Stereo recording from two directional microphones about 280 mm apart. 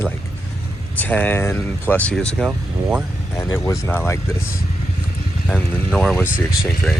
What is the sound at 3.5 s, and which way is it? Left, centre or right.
Speech, centre.